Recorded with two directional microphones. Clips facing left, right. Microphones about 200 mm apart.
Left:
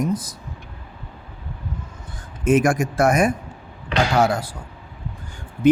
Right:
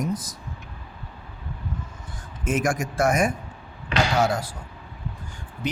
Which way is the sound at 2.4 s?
60° left (ahead or behind).